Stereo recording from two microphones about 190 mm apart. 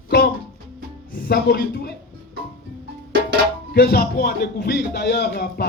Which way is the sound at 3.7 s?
55° left (ahead or behind).